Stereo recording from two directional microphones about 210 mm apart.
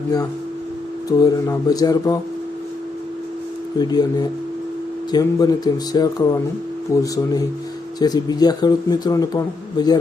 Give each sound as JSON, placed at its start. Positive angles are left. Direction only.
{"t": 1.2, "sound": "speech", "side_deg": 15}
{"t": 3.8, "sound": "a man's voice", "side_deg": 20}